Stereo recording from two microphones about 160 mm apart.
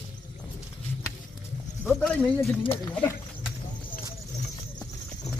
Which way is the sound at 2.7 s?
15° left (ahead or behind).